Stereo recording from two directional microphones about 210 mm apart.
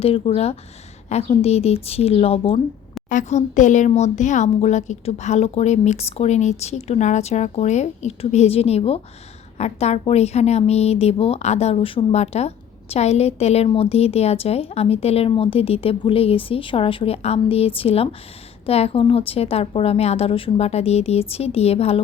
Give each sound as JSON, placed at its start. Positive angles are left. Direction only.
{"t": 0.0, "sound": "a woman's voice", "side_deg": 30}